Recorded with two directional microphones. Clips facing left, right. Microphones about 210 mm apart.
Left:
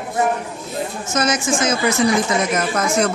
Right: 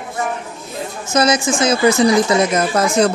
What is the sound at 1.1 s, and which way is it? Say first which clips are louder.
A woman's voice: right 5 dB; 35° right (ahead or behind).